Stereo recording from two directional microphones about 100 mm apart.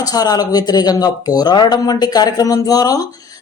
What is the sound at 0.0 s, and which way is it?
Speech, 40° left (ahead or behind).